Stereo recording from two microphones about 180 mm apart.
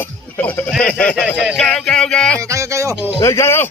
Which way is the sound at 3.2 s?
15° left (ahead or behind).